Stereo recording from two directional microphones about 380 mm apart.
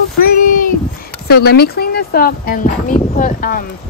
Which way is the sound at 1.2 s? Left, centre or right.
Left.